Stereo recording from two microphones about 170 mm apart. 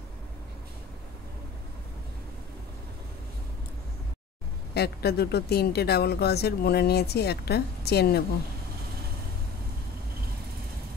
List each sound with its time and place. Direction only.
4.7 s speech: 70° left (ahead or behind)